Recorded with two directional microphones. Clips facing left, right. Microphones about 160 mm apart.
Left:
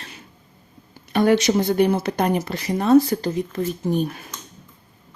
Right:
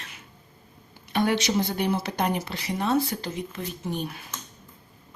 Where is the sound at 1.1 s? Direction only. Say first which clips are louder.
Left 7 dB; 50° left (ahead or behind).